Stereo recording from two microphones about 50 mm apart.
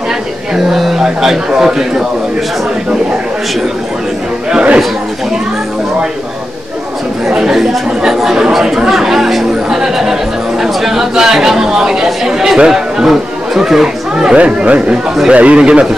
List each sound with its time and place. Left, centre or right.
0.6 s a sound: centre
1.0 s speech: centre
4.5 s speech: centre
7.2 s speech: centre
14.4 s speech: right